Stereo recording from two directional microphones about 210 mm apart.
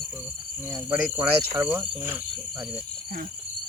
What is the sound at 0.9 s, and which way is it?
Speech, 10° right (ahead or behind).